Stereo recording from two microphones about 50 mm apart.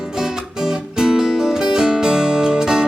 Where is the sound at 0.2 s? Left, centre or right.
Centre.